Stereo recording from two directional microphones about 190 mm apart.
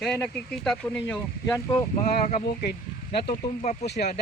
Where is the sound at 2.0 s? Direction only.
40° left (ahead or behind).